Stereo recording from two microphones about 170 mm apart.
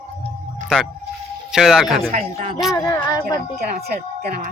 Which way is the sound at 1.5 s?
Centre (ahead or behind).